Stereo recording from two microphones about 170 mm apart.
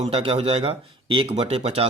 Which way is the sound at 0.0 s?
35° right (ahead or behind).